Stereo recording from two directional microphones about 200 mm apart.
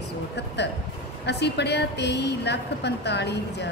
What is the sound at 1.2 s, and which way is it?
A woman's voice, 55° left (ahead or behind).